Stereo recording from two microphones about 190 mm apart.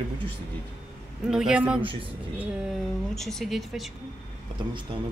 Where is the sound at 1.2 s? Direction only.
5° right (ahead or behind).